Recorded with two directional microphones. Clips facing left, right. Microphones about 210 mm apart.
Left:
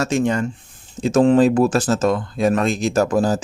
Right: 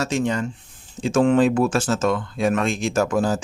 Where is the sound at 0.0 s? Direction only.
50° left (ahead or behind).